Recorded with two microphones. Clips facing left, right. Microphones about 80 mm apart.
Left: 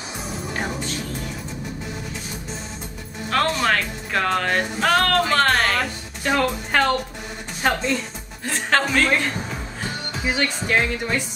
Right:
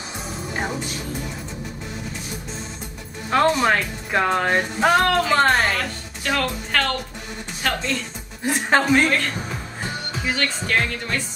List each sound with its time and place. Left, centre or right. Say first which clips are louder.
3.3 s speech: right 3 dB; centre
5.5 s music: even; centre
6.2 s music: left 3 dB; centre
8.5 s speech: right 3 dB; centre
10.2 s speech: left 2 dB; centre